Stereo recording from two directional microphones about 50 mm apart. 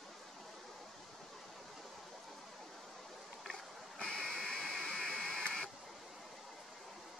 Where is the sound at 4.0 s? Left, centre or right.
Centre.